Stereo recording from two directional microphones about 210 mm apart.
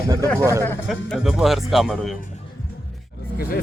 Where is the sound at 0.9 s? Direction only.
Centre (ahead or behind).